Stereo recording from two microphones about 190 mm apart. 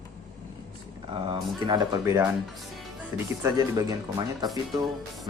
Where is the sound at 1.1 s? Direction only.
25° right (ahead or behind).